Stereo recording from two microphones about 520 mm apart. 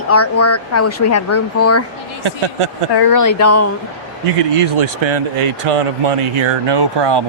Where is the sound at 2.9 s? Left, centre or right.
Left.